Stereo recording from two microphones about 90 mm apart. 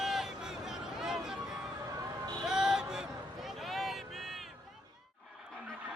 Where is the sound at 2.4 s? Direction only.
5° right (ahead or behind).